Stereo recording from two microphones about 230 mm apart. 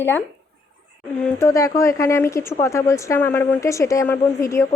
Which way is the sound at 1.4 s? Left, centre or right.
Centre.